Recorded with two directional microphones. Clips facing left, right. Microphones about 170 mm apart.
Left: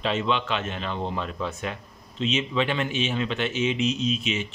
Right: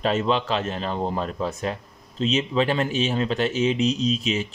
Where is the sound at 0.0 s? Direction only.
40° right (ahead or behind).